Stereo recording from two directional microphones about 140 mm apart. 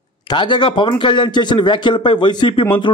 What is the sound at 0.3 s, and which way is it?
A man's voice, 35° left (ahead or behind).